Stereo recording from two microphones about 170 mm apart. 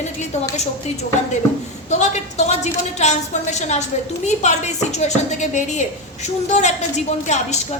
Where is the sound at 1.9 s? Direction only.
40° left (ahead or behind).